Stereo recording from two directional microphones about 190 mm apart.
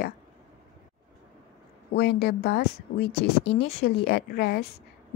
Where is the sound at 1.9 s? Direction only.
60° left (ahead or behind).